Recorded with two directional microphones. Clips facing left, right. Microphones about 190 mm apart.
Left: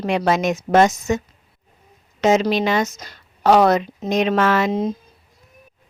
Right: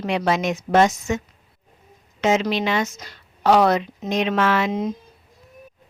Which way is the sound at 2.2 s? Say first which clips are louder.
Left 3 dB; 40° left (ahead or behind).